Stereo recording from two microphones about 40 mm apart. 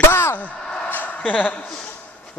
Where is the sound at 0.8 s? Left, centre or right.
Left.